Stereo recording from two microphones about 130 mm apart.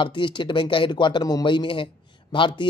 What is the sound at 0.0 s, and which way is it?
Speech, 40° left (ahead or behind).